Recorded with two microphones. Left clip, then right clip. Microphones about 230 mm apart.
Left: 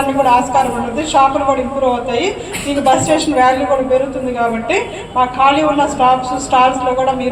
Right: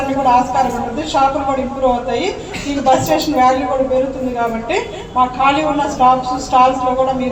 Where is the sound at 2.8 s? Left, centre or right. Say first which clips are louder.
Left 1 dB; left.